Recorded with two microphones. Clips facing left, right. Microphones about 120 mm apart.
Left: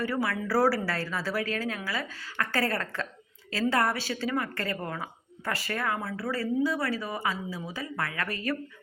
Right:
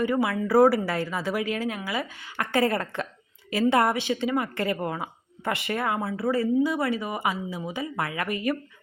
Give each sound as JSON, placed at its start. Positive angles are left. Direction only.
{"t": 0.0, "sound": "a woman's voice", "side_deg": -20}